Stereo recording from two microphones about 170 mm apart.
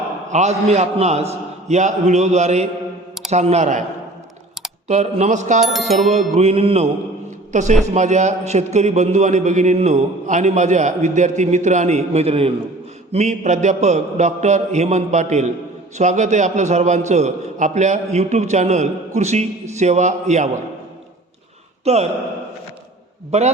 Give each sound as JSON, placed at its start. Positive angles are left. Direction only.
{"t": 0.3, "sound": "a man's voice", "side_deg": -45}
{"t": 4.9, "sound": "a man's voice", "side_deg": -40}
{"t": 5.6, "sound": "bicycle bell", "side_deg": 0}
{"t": 6.1, "sound": "music", "side_deg": -40}
{"t": 7.3, "sound": "a sound", "side_deg": -45}
{"t": 7.9, "sound": "a man's voice", "side_deg": -45}
{"t": 21.9, "sound": "music", "side_deg": -40}
{"t": 23.3, "sound": "music", "side_deg": -40}